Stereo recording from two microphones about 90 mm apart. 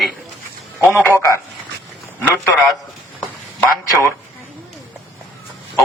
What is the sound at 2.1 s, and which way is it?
Speech, 20° left (ahead or behind).